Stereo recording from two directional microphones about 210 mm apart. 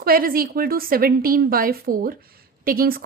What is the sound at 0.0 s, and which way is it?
A woman's voice, 45° right (ahead or behind).